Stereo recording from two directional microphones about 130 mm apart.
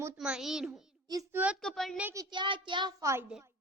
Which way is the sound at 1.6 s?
5° left (ahead or behind).